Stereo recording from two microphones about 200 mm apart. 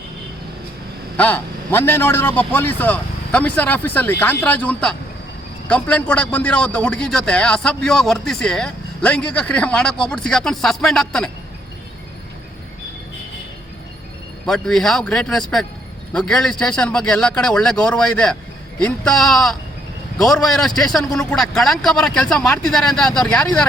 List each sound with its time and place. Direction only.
1.1 s a man's voice: 10° left (ahead or behind)
14.4 s a man's voice: centre (ahead or behind)